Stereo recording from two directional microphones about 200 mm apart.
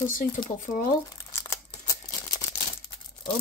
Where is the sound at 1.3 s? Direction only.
15° left (ahead or behind).